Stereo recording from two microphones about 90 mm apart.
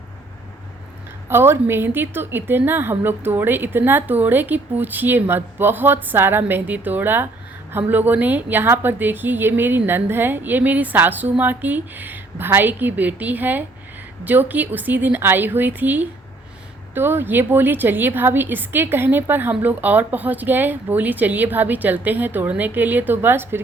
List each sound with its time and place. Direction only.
1.3 s a woman's voice: 25° right (ahead or behind)